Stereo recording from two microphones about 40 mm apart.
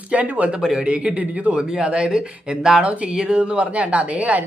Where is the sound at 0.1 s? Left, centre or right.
Right.